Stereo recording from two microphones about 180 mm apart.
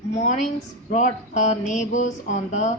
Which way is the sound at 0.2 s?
40° left (ahead or behind).